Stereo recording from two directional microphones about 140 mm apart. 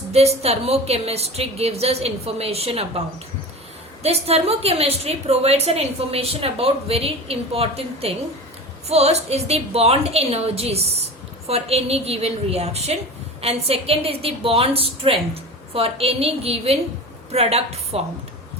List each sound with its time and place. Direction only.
0.1 s a woman's voice: 50° right (ahead or behind)
4.0 s a woman's voice: 45° right (ahead or behind)